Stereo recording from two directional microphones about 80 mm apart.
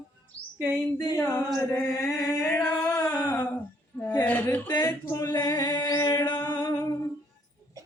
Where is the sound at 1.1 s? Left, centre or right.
Left.